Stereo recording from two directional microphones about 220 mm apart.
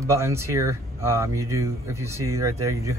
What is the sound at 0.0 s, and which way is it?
Speech, 10° right (ahead or behind).